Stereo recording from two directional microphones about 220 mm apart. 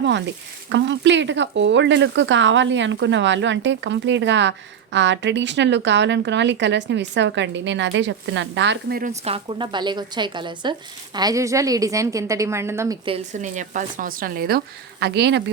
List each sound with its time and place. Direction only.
0.7 s speech: 55° right (ahead or behind)
9.2 s speech: 25° right (ahead or behind)
13.1 s speech: 30° right (ahead or behind); by 15.4 s 50° right (ahead or behind)